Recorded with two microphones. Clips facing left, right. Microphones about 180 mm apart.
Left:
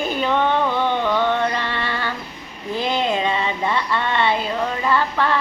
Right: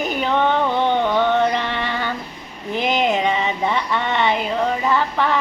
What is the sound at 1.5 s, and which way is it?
Music, 15° right (ahead or behind).